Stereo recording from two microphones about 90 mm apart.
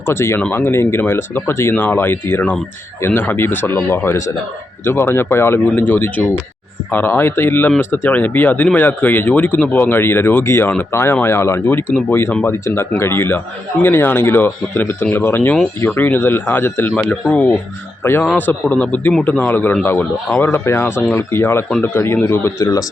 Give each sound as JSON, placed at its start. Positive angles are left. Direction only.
{"t": 0.0, "sound": "a man's voice", "side_deg": 30}